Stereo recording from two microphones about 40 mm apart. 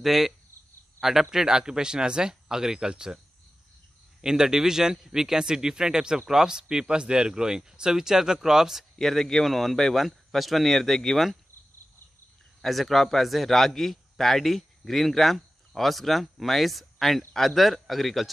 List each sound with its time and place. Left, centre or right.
0.0 s speech: centre
1.3 s speech: centre
4.2 s speech: centre
8.9 s a man's voice: centre
12.6 s speech: centre